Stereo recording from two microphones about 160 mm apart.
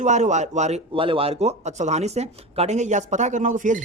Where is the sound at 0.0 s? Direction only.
45° right (ahead or behind).